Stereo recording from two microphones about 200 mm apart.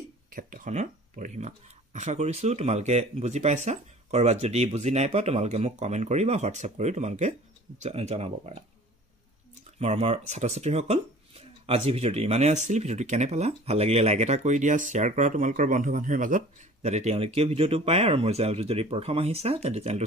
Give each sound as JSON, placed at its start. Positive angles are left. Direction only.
{"t": 0.3, "sound": "speech", "side_deg": -45}
{"t": 9.8, "sound": "speech", "side_deg": -30}